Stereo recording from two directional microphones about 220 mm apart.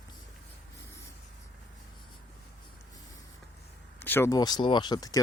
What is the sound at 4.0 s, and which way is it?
Speech, 10° left (ahead or behind).